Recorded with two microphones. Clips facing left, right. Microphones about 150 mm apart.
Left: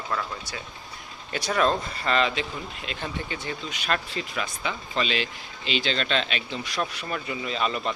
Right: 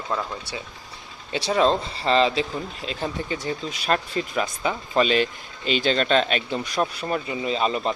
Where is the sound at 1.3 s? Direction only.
25° right (ahead or behind).